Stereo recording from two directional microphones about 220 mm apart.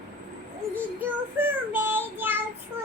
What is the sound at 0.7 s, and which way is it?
Child singing, 10° right (ahead or behind).